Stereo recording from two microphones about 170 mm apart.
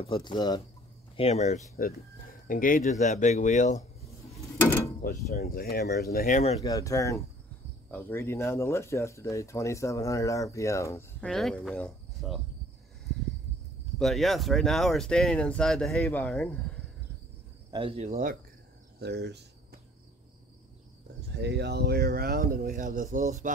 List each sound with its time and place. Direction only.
0.0 s speech: 30° left (ahead or behind)
1.1 s speech: 40° left (ahead or behind)
2.4 s speech: 55° left (ahead or behind)
4.6 s mechanisms: 15° left (ahead or behind)
5.3 s speech: 65° left (ahead or behind)
6.1 s speech: 50° left (ahead or behind)
6.6 s speech: 20° left (ahead or behind)
11.2 s speech: 5° left (ahead or behind)
13.9 s speech: centre (ahead or behind)
17.6 s cricket: 30° right (ahead or behind)
18.9 s cricket: 80° right
21.4 s speech: 80° right; by 23.5 s 45° right (ahead or behind)